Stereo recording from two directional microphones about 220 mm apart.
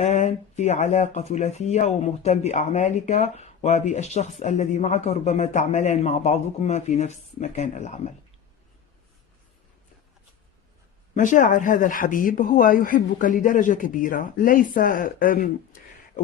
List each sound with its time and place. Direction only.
0.0 s speech: 30° left (ahead or behind)
11.1 s speech: 35° left (ahead or behind)